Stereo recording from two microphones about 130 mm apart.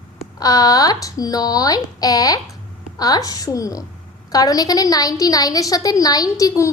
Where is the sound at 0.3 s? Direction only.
30° left (ahead or behind).